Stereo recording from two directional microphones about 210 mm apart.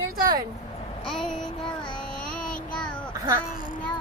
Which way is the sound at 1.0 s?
Centre (ahead or behind).